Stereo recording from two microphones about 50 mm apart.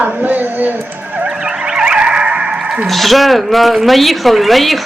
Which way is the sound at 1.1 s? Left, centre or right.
Centre.